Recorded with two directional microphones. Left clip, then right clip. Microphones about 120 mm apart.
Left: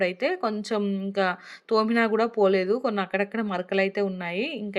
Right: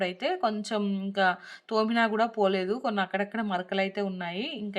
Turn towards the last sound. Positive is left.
turn(degrees=25)  # may be behind; listen again after turning